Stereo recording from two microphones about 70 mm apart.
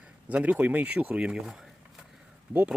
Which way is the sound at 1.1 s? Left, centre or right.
Centre.